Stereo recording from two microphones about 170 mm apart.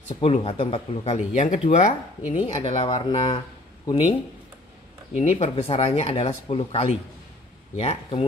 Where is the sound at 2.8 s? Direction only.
25° left (ahead or behind).